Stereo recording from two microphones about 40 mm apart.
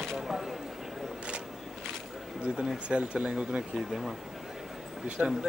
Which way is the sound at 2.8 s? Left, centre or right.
Right.